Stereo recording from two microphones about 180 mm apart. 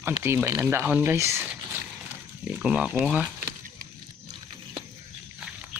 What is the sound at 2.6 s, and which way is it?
Speech, 5° right (ahead or behind).